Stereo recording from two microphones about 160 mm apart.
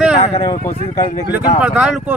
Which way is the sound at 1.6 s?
5° right (ahead or behind).